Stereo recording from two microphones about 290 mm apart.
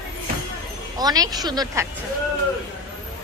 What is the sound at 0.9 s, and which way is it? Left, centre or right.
Speech, centre.